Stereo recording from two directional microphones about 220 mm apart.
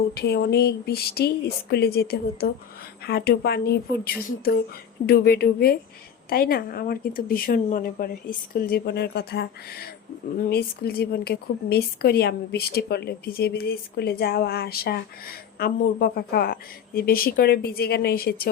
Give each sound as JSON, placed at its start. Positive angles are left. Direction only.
{"t": 0.1, "sound": "speech", "side_deg": 45}